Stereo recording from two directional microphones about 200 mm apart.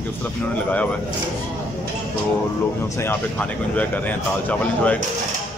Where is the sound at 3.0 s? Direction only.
10° left (ahead or behind).